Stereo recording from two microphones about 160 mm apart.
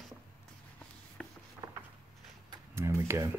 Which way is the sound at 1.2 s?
5° left (ahead or behind).